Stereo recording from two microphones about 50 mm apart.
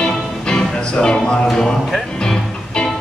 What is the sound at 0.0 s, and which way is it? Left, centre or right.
Music, centre.